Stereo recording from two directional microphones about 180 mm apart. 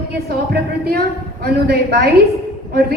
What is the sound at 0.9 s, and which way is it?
A woman's voice, 60° right (ahead or behind).